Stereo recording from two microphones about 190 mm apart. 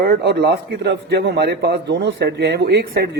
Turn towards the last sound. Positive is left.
turn(degrees=-60)  # may be behind; listen again after turning